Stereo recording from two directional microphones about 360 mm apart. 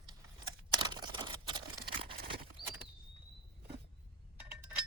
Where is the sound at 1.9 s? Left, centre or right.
Centre.